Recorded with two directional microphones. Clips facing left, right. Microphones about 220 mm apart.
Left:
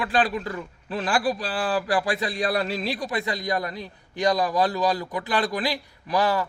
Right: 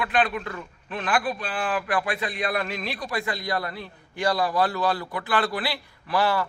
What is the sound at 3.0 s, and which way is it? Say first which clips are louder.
A man's voice: left 2 dB; 20° left (ahead or behind).